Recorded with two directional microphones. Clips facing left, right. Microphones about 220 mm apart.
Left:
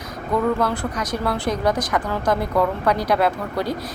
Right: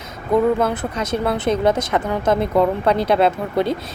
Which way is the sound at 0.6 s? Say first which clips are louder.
Right 2 dB; 20° right (ahead or behind).